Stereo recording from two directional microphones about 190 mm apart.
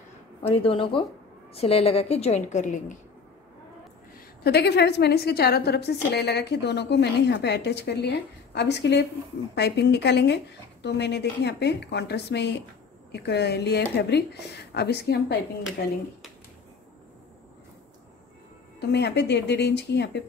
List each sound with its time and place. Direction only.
0.4 s a woman's voice: 30° left (ahead or behind)
4.4 s a woman's voice: 60° left (ahead or behind)
18.8 s a woman's voice: 60° left (ahead or behind)